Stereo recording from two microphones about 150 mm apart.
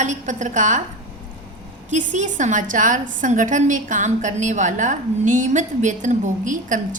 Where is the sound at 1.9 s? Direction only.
55° right (ahead or behind).